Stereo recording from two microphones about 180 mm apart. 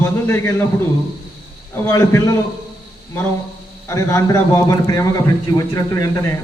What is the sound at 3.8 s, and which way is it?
A man's voice, 15° left (ahead or behind).